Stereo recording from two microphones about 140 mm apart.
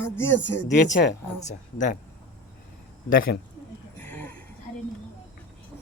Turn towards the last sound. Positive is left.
turn(degrees=10)  # may be behind; listen again after turning